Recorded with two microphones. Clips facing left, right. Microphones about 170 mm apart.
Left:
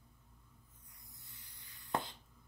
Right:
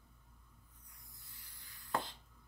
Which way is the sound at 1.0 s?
20° left (ahead or behind).